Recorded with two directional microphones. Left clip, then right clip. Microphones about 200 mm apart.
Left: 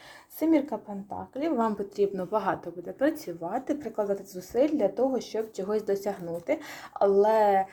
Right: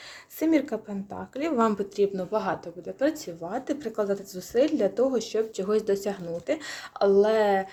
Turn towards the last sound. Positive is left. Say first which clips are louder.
# even
turn(degrees=-10)  # may be behind; listen again after turning